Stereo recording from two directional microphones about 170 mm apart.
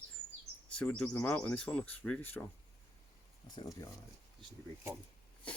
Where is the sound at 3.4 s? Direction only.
25° left (ahead or behind).